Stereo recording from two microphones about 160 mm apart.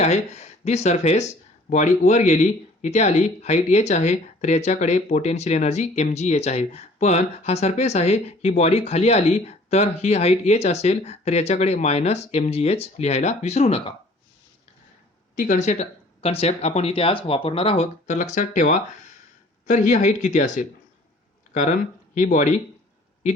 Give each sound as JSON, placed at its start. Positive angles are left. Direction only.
{"t": 0.0, "sound": "speech", "side_deg": 40}
{"t": 15.4, "sound": "speech", "side_deg": 50}
{"t": 19.6, "sound": "speech", "side_deg": 50}